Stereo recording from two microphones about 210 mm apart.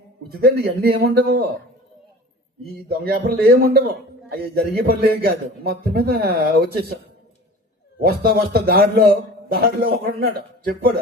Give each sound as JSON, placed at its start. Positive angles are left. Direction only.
{"t": 0.3, "sound": "a man's voice", "side_deg": -50}
{"t": 2.9, "sound": "a man's voice", "side_deg": -50}
{"t": 8.0, "sound": "a man's voice", "side_deg": -45}